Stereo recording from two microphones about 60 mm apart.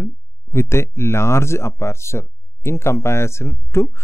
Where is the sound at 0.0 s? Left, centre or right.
Left.